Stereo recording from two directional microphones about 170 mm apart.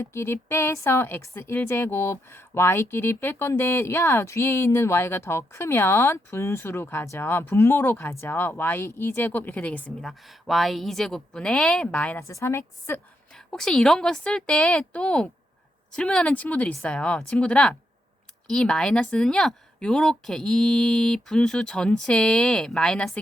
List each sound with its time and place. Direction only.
0.0 s a woman's voice: 15° left (ahead or behind)
13.5 s a woman's voice: 5° left (ahead or behind)